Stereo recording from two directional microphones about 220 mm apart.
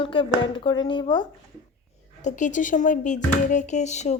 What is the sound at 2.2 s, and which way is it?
A woman's voice, 35° left (ahead or behind).